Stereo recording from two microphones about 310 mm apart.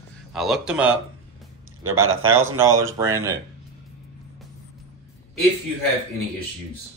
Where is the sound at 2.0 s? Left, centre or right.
Right.